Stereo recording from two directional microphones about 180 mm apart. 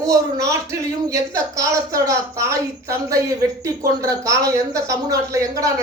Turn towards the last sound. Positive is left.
turn(degrees=-15)  # may be behind; listen again after turning